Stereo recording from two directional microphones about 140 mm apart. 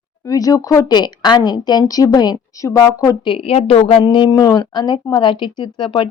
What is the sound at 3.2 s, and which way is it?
Speech, 40° left (ahead or behind).